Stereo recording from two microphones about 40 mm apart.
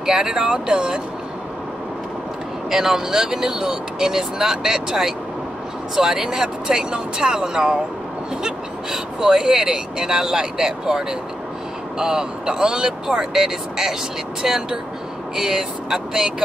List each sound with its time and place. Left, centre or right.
0.0 s speech: centre
2.7 s speech: centre